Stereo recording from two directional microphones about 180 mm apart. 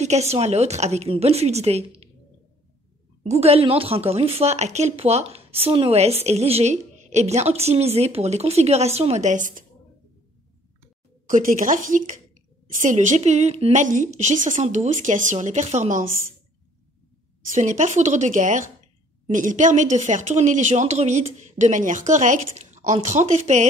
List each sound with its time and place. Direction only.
0.0 s a woman's voice: 40° right (ahead or behind)
3.3 s a woman's voice: 35° right (ahead or behind)
11.2 s speech: 45° right (ahead or behind)
17.5 s a woman's voice: 45° right (ahead or behind)